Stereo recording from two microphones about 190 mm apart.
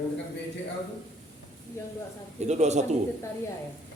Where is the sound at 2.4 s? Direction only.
35° right (ahead or behind).